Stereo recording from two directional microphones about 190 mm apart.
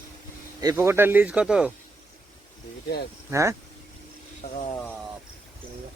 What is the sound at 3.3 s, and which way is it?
Speech, 15° right (ahead or behind).